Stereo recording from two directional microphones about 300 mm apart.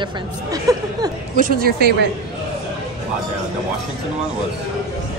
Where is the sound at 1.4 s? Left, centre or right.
Right.